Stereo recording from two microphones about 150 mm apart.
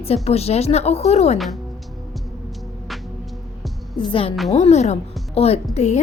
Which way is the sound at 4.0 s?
35° left (ahead or behind).